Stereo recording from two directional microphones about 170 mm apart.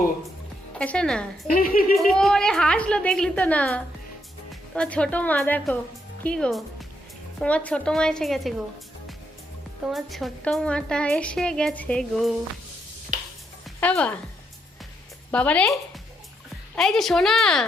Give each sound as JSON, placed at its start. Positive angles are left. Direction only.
{"t": 0.8, "sound": "a woman's voice", "side_deg": 5}
{"t": 1.5, "sound": "speech", "side_deg": 55}
{"t": 2.0, "sound": "a woman's voice", "side_deg": 0}
{"t": 9.9, "sound": "a woman's voice", "side_deg": 0}
{"t": 13.7, "sound": "a woman's voice", "side_deg": 10}
{"t": 15.3, "sound": "a woman's voice", "side_deg": 5}